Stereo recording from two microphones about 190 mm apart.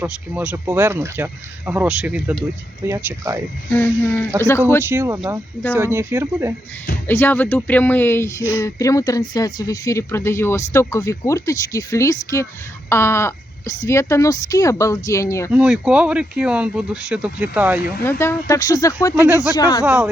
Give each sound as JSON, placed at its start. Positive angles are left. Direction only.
{"t": 0.0, "sound": "speech", "side_deg": -10}
{"t": 3.7, "sound": "speech", "side_deg": 10}
{"t": 4.9, "sound": "speech", "side_deg": -10}
{"t": 7.1, "sound": "speech", "side_deg": 10}
{"t": 15.5, "sound": "speech", "side_deg": -5}
{"t": 18.2, "sound": "speech", "side_deg": 15}
{"t": 19.8, "sound": "speech", "side_deg": -5}